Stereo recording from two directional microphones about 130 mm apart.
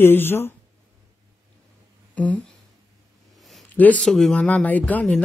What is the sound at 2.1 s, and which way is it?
Speech, 10° left (ahead or behind).